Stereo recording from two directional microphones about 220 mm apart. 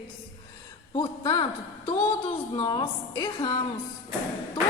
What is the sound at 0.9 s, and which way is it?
Speech, 20° left (ahead or behind).